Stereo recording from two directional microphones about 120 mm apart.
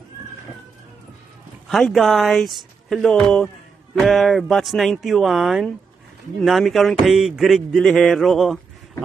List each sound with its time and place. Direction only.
1.7 s speech: centre (ahead or behind)